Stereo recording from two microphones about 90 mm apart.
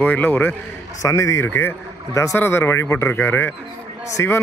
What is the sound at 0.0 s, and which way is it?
Speech, 20° left (ahead or behind).